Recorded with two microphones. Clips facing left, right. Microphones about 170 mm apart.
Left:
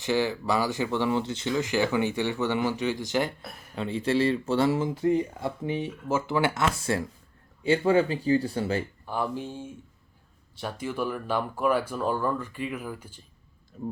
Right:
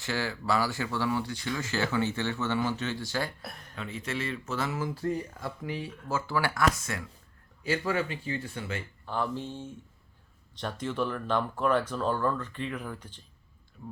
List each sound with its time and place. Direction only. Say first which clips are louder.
0.0 s speech: left 7 dB; 20° left (ahead or behind)
3.8 s speech: left 10 dB; 30° left (ahead or behind)
9.0 s speech: right 2 dB; 10° left (ahead or behind)